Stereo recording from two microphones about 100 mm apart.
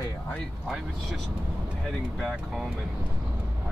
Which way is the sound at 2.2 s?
5° right (ahead or behind).